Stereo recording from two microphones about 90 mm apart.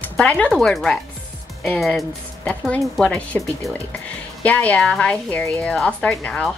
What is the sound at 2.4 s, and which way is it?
Speech, 15° left (ahead or behind).